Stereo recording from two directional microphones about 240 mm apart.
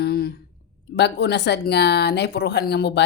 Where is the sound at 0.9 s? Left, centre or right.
Left.